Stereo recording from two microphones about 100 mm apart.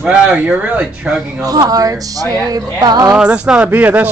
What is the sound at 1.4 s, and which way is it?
Speech, 40° right (ahead or behind).